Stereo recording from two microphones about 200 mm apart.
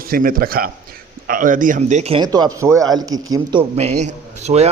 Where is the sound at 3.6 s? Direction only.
35° right (ahead or behind).